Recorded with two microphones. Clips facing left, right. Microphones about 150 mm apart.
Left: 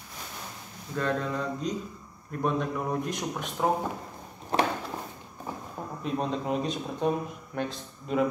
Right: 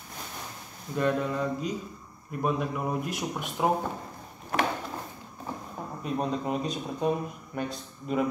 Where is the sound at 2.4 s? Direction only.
5° right (ahead or behind).